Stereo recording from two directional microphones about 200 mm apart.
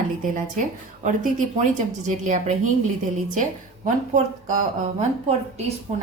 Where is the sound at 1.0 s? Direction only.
40° right (ahead or behind).